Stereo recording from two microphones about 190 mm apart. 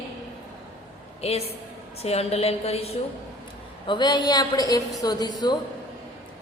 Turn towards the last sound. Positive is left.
turn(degrees=20)  # may be behind; listen again after turning